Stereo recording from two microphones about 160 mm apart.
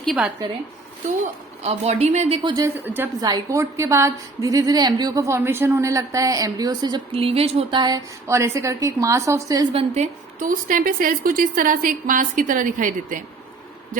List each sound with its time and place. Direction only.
0.0 s a woman's voice: centre (ahead or behind)
1.2 s a woman's voice: 40° right (ahead or behind)
2.6 s a woman's voice: 15° right (ahead or behind)
9.7 s a woman's voice: 40° right (ahead or behind)
10.4 s a woman's voice: 60° right (ahead or behind)